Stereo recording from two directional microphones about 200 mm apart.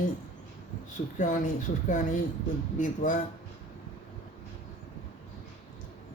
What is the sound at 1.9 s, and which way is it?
Speech, 40° left (ahead or behind).